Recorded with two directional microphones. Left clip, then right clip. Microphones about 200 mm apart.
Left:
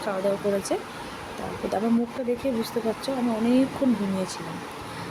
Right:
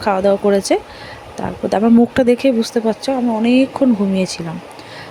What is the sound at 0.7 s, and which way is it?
Speech, 40° right (ahead or behind).